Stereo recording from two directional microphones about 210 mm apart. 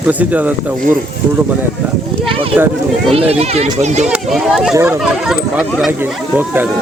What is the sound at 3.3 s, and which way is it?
Speech, 30° right (ahead or behind).